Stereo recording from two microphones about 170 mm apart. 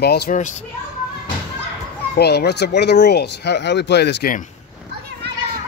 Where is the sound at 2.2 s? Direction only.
70° left (ahead or behind).